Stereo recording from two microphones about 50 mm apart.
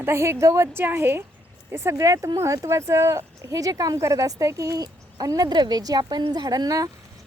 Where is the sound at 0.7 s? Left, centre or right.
Right.